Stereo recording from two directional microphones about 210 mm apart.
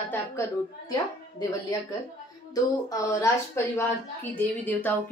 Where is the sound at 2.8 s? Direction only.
15° left (ahead or behind).